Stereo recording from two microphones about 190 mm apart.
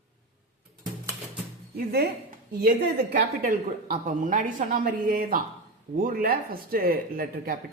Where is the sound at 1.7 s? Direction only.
55° right (ahead or behind).